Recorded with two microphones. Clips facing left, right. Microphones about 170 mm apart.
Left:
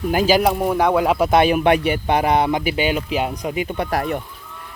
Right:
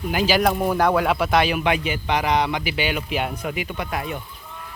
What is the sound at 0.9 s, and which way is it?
Speech, 35° left (ahead or behind).